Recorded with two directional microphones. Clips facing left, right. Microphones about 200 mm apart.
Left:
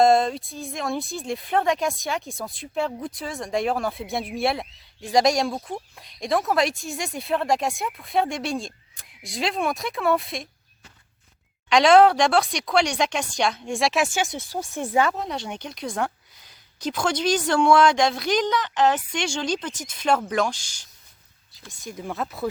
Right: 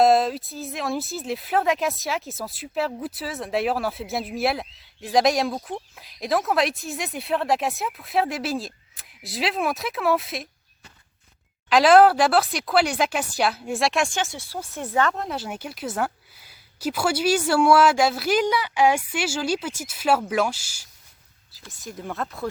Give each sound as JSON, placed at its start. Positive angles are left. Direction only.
{"t": 0.0, "sound": "a woman's voice", "side_deg": -5}
{"t": 11.7, "sound": "a woman's voice", "side_deg": -5}
{"t": 14.3, "sound": "a woman's voice", "side_deg": 20}